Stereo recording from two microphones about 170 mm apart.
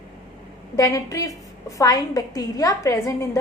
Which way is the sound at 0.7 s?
20° left (ahead or behind).